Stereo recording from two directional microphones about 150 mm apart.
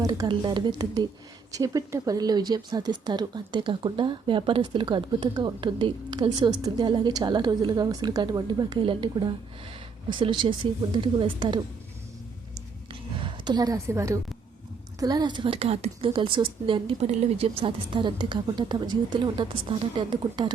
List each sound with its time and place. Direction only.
0.0 s a woman's voice: 25° right (ahead or behind)
12.9 s a sound: 35° right (ahead or behind)
14.9 s a woman's voice: 25° right (ahead or behind)